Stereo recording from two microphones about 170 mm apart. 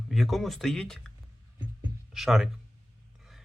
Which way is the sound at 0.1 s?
Centre (ahead or behind).